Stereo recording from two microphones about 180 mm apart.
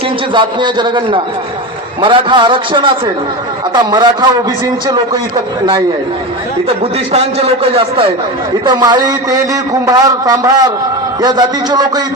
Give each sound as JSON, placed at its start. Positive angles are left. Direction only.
{"t": 0.3, "sound": "a man's voice", "side_deg": -25}
{"t": 6.7, "sound": "a man's voice", "side_deg": -35}